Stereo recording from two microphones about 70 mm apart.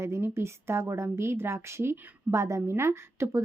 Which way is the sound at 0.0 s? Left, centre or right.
Right.